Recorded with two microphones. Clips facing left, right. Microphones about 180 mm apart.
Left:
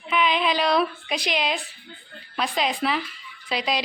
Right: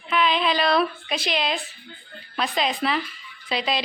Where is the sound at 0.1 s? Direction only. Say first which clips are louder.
Even; 15° left (ahead or behind).